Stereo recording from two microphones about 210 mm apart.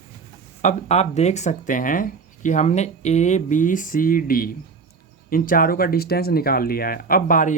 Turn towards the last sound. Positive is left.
turn(degrees=40)  # may be behind; listen again after turning